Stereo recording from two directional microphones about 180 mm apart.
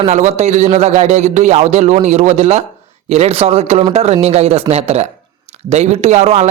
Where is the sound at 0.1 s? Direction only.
40° right (ahead or behind).